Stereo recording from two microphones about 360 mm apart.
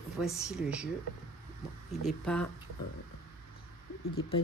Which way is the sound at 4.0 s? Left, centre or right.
Left.